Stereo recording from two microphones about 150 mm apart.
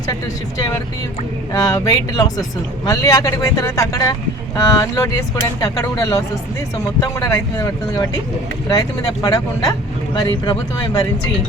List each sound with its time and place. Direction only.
1.5 s speech: 25° left (ahead or behind)